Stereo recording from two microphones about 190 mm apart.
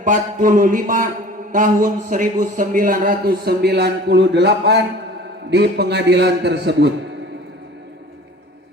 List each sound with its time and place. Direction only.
0.0 s a man's voice: 45° right (ahead or behind); by 6.9 s 65° right (ahead or behind)